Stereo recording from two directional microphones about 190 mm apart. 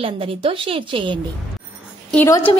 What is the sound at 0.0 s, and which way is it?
A woman's voice, 30° right (ahead or behind).